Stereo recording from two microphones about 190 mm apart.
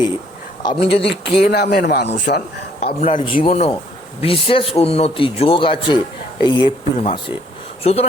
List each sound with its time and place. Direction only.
0.6 s a man's voice: 30° left (ahead or behind)
1.5 s speech: 55° left (ahead or behind)
2.8 s a man's voice: 30° left (ahead or behind)